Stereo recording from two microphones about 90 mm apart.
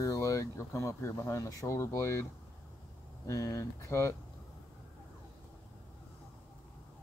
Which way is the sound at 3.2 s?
35° left (ahead or behind).